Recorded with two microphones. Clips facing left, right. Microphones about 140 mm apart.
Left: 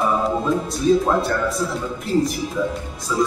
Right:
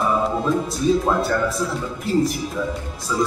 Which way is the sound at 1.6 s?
Centre (ahead or behind).